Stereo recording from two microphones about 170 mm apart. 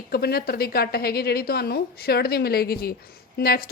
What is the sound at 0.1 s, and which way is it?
A woman's voice, 65° left (ahead or behind).